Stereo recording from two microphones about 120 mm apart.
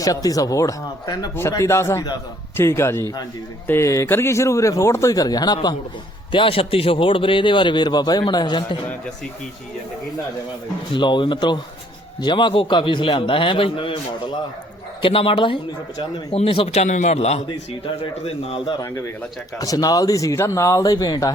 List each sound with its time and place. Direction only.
0.0 s speech: 30° left (ahead or behind)
6.3 s a man's voice: 50° left (ahead or behind)
10.9 s a man's voice: 40° left (ahead or behind); by 17.4 s 65° left (ahead or behind)
18.0 s a man's voice: 45° left (ahead or behind)
18.8 s speech: 25° left (ahead or behind)